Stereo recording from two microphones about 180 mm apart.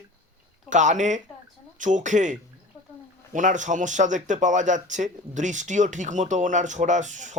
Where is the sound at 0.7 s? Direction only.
45° right (ahead or behind).